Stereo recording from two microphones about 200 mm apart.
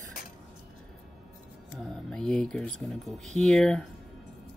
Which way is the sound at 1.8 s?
5° left (ahead or behind).